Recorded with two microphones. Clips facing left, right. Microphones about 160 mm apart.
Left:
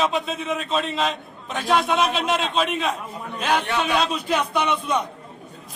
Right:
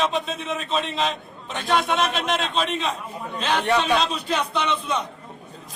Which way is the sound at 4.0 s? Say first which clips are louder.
Left 2 dB; 10° left (ahead or behind).